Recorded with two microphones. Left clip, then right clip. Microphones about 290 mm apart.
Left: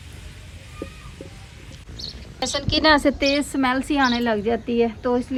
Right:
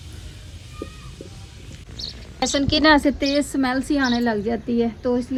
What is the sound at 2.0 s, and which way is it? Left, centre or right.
Speech, centre.